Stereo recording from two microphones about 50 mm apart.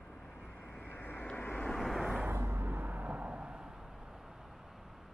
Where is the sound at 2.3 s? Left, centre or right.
Right; by 3.7 s centre.